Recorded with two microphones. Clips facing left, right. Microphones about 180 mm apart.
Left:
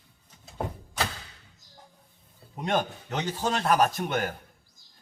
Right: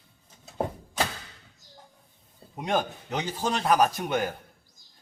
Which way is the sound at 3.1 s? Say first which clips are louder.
Even; 15° right (ahead or behind).